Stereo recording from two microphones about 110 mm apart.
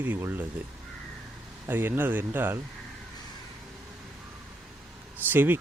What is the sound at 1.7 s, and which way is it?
Speech, 20° right (ahead or behind).